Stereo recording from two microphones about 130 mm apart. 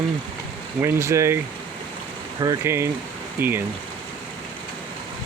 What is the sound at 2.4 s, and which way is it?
Speech, 25° right (ahead or behind).